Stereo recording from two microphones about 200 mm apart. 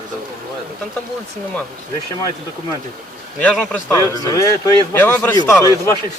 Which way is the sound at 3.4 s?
5° left (ahead or behind).